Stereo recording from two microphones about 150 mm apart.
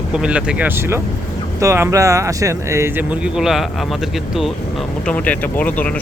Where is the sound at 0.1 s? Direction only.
5° right (ahead or behind).